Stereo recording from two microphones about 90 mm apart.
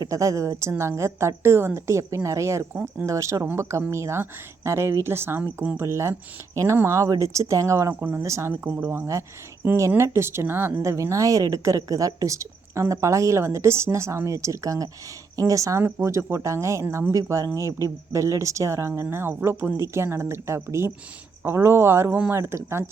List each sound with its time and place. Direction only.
0.0 s a woman's voice: 35° right (ahead or behind)